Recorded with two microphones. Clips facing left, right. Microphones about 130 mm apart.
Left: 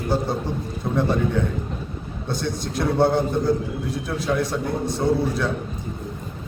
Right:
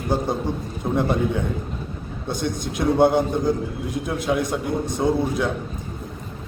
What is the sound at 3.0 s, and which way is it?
A man's voice, 15° right (ahead or behind).